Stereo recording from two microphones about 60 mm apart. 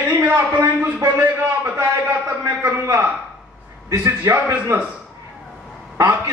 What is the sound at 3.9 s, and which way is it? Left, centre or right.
Speech, right.